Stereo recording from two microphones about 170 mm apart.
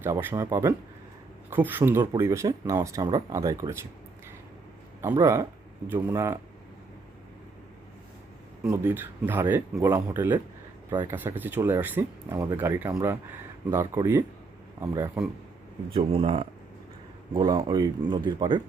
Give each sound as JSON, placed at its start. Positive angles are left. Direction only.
{"t": 0.0, "sound": "speech", "side_deg": -10}
{"t": 4.9, "sound": "speech", "side_deg": -15}
{"t": 8.7, "sound": "speech", "side_deg": -10}
{"t": 16.0, "sound": "speech", "side_deg": -30}